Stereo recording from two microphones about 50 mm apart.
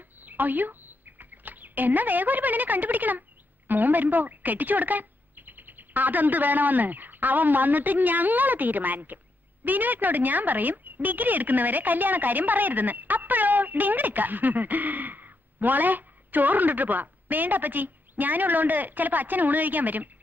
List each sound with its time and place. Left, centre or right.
0.2 s a woman's voice: right